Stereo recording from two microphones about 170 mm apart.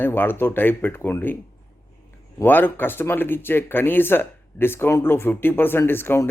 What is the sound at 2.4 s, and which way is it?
Speech, 10° left (ahead or behind).